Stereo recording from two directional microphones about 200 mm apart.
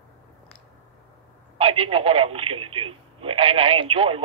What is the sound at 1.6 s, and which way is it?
Speech, 30° right (ahead or behind).